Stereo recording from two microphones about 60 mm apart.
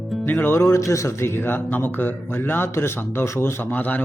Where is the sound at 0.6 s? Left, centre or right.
Left.